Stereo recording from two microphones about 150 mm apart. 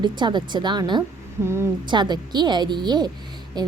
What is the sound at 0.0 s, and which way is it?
A woman's voice, 30° right (ahead or behind).